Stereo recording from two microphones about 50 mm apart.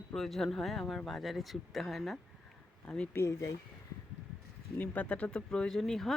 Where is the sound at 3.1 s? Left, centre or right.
Left.